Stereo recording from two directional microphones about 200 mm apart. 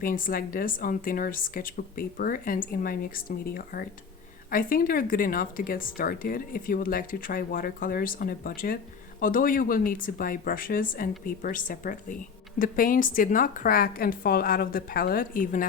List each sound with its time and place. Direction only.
0.0 s speech: 45° left (ahead or behind)